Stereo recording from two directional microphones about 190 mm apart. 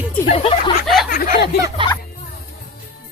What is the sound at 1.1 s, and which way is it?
Speech, 50° left (ahead or behind).